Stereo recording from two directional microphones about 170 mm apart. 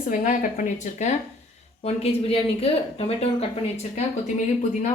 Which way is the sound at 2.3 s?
35° left (ahead or behind).